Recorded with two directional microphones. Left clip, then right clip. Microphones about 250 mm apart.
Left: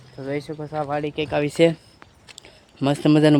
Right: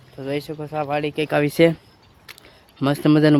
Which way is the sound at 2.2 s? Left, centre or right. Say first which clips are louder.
Right 3 dB; centre.